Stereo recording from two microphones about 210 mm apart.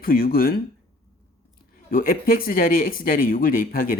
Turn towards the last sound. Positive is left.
turn(degrees=40)  # may be behind; listen again after turning